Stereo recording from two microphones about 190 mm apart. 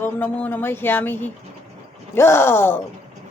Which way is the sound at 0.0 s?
10° left (ahead or behind).